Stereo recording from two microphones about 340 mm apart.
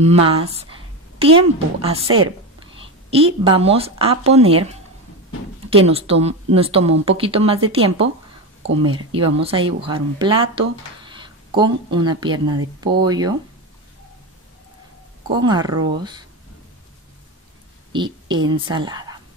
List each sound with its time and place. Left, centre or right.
0.0 s speech: centre
15.3 s speech: centre
17.9 s speech: centre